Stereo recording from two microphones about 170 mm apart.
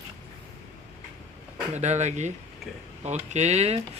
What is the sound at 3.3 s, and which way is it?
Speech, 40° right (ahead or behind).